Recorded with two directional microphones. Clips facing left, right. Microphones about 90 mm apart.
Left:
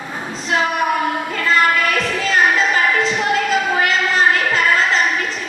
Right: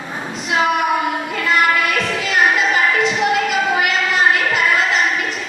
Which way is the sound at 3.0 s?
35° left (ahead or behind).